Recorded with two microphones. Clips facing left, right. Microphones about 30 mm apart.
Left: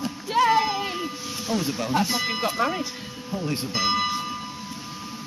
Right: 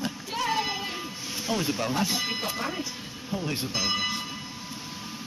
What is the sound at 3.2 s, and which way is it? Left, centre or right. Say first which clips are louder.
Speech: left 2 dB; centre.